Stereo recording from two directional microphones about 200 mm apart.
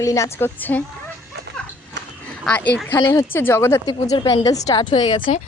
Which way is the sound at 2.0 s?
60° right (ahead or behind).